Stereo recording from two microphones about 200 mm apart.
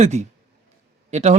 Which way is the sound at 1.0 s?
35° right (ahead or behind).